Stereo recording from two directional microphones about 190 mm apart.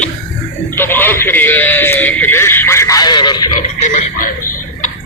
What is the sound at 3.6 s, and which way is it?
Chuckle, 40° left (ahead or behind).